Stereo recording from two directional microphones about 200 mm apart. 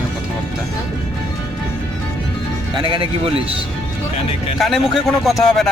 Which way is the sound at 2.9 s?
25° right (ahead or behind).